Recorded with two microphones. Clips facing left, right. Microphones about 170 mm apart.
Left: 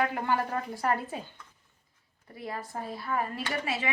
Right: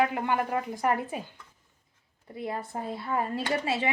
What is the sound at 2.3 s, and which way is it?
A woman's voice, 20° right (ahead or behind).